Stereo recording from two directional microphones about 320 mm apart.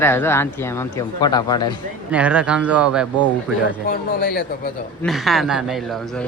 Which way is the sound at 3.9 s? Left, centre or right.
Left.